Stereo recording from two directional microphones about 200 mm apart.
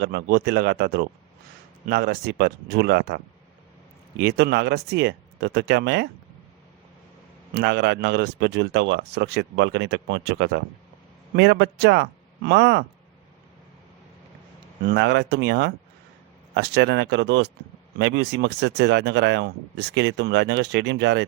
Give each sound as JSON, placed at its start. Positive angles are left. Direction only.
{"t": 0.0, "sound": "a man's voice", "side_deg": -55}
{"t": 4.2, "sound": "speech", "side_deg": -55}
{"t": 7.5, "sound": "speech", "side_deg": -60}
{"t": 14.8, "sound": "speech", "side_deg": -60}